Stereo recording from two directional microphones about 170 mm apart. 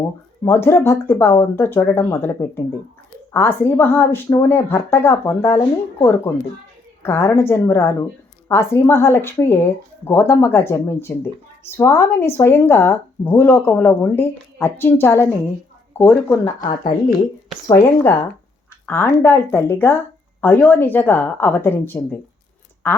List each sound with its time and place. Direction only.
0.4 s speech: 15° left (ahead or behind)
17.7 s speech: 15° left (ahead or behind)